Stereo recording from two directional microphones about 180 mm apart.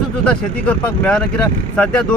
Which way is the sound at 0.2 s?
5° left (ahead or behind).